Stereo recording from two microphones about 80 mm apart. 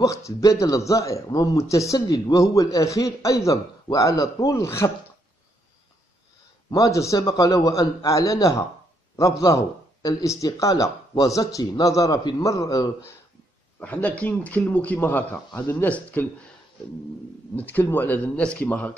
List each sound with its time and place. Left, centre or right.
0.0 s speech: left
6.7 s a man's voice: left
13.7 s a man's voice: centre
17.6 s speech: left